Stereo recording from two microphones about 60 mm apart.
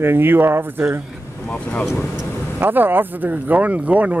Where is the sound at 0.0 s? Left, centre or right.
Right.